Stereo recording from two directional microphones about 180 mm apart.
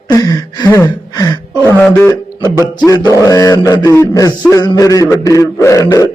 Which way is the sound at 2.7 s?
20° left (ahead or behind).